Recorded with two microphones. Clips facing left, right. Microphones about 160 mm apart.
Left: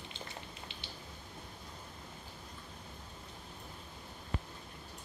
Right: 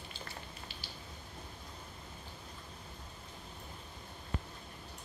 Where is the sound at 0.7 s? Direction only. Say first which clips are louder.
Even; 20° left (ahead or behind).